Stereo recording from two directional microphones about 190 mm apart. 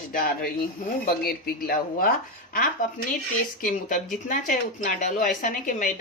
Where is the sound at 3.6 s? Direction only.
45° left (ahead or behind).